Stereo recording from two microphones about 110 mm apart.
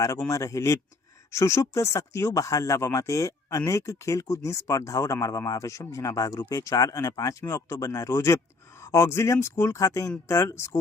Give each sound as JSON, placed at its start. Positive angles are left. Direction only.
{"t": 0.3, "sound": "speech", "side_deg": 30}